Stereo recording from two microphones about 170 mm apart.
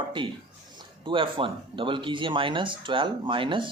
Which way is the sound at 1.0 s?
30° right (ahead or behind).